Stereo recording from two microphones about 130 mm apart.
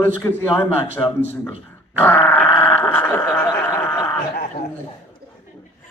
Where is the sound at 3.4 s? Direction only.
30° left (ahead or behind).